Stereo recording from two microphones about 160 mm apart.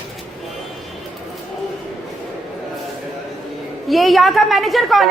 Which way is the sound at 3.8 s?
Centre (ahead or behind).